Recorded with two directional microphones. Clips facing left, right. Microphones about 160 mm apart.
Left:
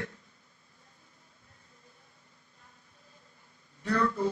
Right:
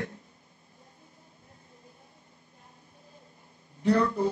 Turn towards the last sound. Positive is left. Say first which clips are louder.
# right 5 dB
turn(degrees=-30)  # may be behind; listen again after turning